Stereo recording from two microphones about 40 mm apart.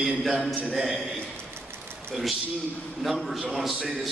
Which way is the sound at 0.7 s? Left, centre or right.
Centre.